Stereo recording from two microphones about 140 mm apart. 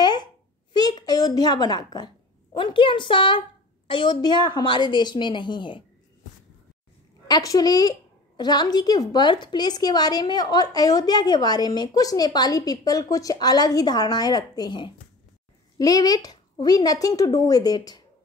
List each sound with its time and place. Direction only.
0.0 s a sound: 30° left (ahead or behind)
2.5 s a woman's voice: 35° left (ahead or behind)
7.2 s a woman's voice: 25° left (ahead or behind)